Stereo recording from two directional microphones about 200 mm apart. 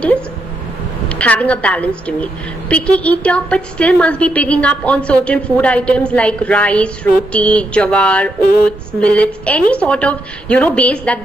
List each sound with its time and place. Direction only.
1.0 s a woman's voice: 5° left (ahead or behind)
8.4 s a sound: 50° left (ahead or behind)
8.6 s a woman's voice: 5° left (ahead or behind)